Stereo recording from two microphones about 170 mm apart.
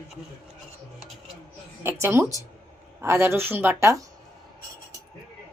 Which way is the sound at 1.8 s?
15° right (ahead or behind).